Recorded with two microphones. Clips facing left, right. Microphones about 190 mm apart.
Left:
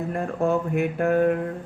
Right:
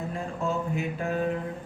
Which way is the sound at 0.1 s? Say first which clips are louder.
Left 9 dB; 60° left (ahead or behind).